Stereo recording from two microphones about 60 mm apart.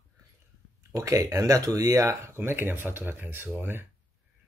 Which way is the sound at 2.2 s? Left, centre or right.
Right.